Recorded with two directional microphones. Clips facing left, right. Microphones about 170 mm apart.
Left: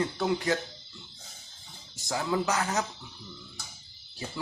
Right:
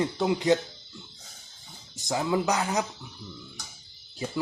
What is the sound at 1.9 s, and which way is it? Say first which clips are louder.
Speech: right 3 dB; 20° right (ahead or behind).